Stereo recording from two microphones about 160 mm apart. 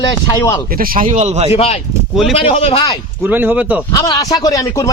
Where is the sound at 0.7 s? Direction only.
65° right (ahead or behind); by 1.5 s 45° right (ahead or behind).